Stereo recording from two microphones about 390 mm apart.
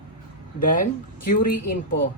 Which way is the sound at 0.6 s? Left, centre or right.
Centre.